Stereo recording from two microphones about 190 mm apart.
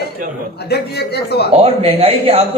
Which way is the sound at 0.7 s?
60° left (ahead or behind).